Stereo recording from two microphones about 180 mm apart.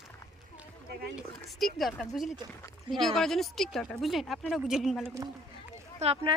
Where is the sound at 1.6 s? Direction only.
Centre (ahead or behind).